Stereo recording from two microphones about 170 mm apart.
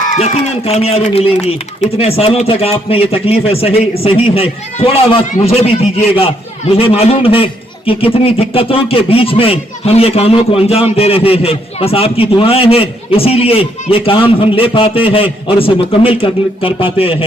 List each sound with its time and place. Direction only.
0.2 s a man's voice: 35° left (ahead or behind)